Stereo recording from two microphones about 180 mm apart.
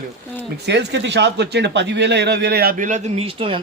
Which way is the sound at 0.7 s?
75° right (ahead or behind).